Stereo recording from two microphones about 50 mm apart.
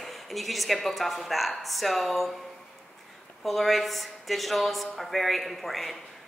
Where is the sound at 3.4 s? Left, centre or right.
Centre.